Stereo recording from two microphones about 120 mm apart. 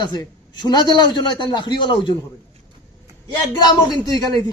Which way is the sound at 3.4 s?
30° left (ahead or behind).